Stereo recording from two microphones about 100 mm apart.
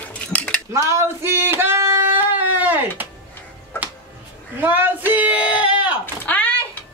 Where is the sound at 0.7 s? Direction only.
30° right (ahead or behind).